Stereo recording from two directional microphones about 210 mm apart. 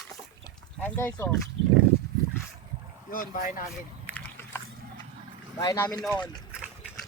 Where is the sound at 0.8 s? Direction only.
10° left (ahead or behind).